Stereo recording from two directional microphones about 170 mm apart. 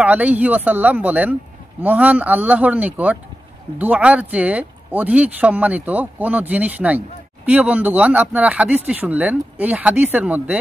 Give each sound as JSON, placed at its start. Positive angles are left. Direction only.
{"t": 0.0, "sound": "speech", "side_deg": -10}